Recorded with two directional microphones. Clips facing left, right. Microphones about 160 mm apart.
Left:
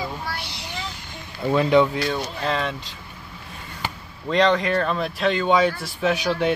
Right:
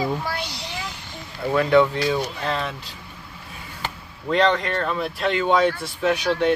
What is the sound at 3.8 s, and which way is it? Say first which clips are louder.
Speech: left 1 dB; centre (ahead or behind).